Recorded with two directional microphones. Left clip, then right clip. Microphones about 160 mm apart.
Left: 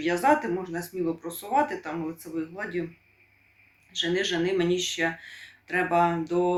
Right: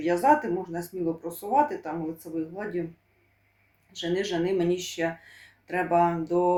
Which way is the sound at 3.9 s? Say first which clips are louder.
Left 2 dB; 20° right (ahead or behind).